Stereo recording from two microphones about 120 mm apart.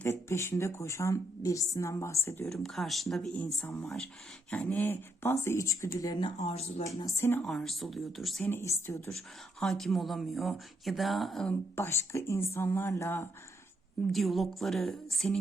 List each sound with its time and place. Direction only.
0.0 s a woman's voice: 20° left (ahead or behind)
2.5 s speech: centre (ahead or behind)
3.8 s speech: 5° left (ahead or behind)
4.5 s a woman's voice: 15° left (ahead or behind); by 6.3 s 35° left (ahead or behind)
6.4 s speech: 60° left (ahead or behind)
6.8 s a woman's voice: 25° left (ahead or behind)
7.4 s speech: 5° left (ahead or behind)
8.4 s a woman's voice: 20° left (ahead or behind)
9.1 s speech: 5° left (ahead or behind)
11.8 s a woman's voice: 20° left (ahead or behind)
14.1 s speech: centre (ahead or behind)